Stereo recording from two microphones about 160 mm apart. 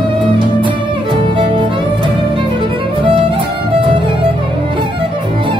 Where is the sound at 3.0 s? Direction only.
35° right (ahead or behind).